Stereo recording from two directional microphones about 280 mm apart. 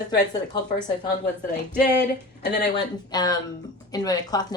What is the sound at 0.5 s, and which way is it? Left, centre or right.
Speech, centre.